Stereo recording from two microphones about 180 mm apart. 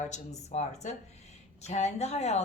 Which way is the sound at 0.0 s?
40° left (ahead or behind).